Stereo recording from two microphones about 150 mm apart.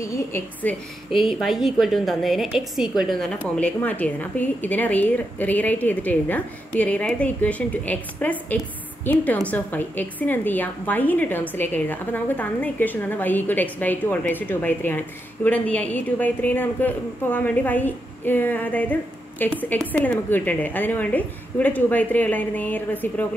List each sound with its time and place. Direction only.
0.0 s a woman's voice: 20° left (ahead or behind)
1.1 s a woman's voice: centre (ahead or behind)